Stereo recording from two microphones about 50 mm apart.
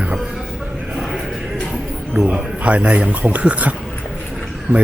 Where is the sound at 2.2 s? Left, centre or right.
Right.